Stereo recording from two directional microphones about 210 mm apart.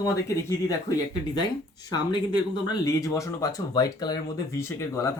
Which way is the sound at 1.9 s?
20° left (ahead or behind).